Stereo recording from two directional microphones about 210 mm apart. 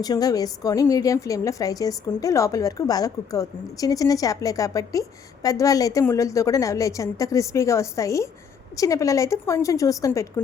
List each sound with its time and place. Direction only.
0.0 s a woman's voice: 20° left (ahead or behind)